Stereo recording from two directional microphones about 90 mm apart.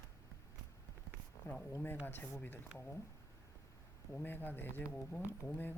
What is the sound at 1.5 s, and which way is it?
Speech, 25° left (ahead or behind).